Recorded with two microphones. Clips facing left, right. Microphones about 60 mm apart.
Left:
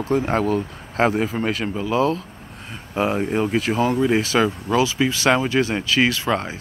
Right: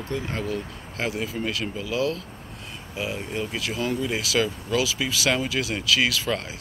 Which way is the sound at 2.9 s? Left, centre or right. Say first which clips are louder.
Left 9 dB; left.